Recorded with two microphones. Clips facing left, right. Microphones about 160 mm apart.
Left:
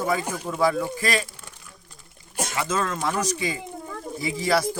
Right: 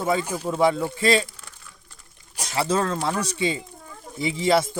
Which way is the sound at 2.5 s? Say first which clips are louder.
Right 4 dB; 30° right (ahead or behind).